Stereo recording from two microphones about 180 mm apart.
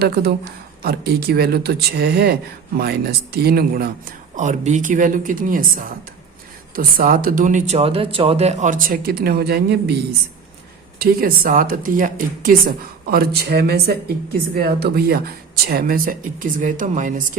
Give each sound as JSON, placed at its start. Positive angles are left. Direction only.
{"t": 0.0, "sound": "speech", "side_deg": -60}
{"t": 11.0, "sound": "speech", "side_deg": -55}